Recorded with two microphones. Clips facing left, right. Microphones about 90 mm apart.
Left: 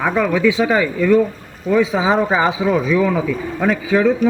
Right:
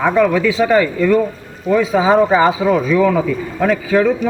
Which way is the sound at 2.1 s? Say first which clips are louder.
Right 8 dB; 5° left (ahead or behind).